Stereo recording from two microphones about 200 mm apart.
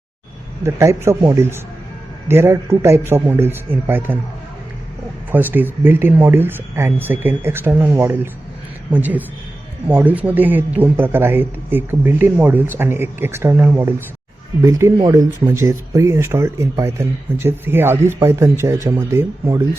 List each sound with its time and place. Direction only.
0.6 s speech: 15° right (ahead or behind)
5.3 s speech: 10° right (ahead or behind)